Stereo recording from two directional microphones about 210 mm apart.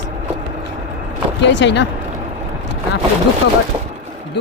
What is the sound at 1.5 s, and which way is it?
Speech, 55° left (ahead or behind).